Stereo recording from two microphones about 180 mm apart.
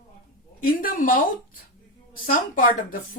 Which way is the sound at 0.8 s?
50° left (ahead or behind).